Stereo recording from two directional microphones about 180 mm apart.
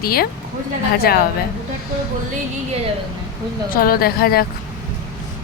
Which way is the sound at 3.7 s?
55° left (ahead or behind).